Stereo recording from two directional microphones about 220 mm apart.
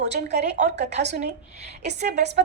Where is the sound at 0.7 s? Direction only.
50° right (ahead or behind).